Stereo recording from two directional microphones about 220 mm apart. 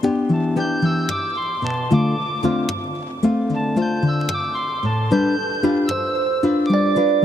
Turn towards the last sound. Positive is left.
turn(degrees=0)  # may be behind; listen again after turning